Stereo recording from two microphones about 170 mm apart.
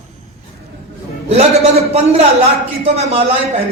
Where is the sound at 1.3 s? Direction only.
35° right (ahead or behind).